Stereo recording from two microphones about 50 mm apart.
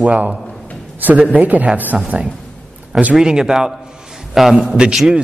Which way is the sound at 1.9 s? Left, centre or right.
Centre.